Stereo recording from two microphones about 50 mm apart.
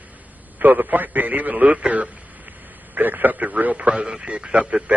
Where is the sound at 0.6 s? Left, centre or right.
Right.